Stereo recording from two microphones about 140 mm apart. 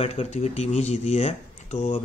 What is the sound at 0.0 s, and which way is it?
Speech, 50° left (ahead or behind).